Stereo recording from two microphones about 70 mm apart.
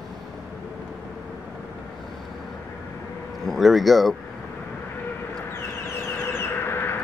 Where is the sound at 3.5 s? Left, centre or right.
Centre.